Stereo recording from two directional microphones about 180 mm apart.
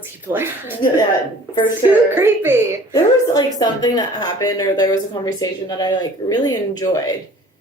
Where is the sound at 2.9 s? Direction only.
20° left (ahead or behind).